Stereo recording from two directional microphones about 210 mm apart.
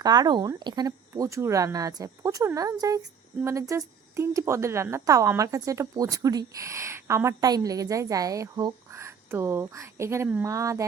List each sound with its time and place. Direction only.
0.0 s a woman's voice: 20° right (ahead or behind)